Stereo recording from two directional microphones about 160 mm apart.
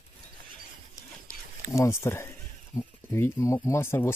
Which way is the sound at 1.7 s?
15° left (ahead or behind).